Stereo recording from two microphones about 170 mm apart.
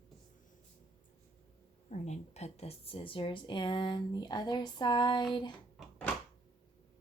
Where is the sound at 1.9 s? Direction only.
40° left (ahead or behind).